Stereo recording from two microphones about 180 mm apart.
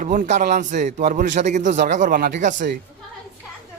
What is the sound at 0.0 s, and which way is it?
Speech, 45° right (ahead or behind).